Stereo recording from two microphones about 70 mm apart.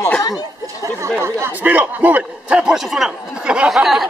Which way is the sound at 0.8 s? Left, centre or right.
Right.